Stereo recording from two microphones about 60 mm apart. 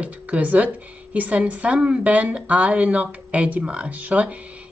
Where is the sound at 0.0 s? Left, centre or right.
Right.